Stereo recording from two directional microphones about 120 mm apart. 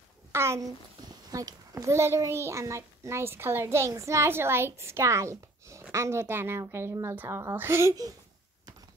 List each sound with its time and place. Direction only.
0.3 s a child's voice: 20° right (ahead or behind)